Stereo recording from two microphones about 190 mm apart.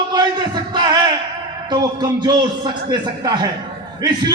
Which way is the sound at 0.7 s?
20° right (ahead or behind).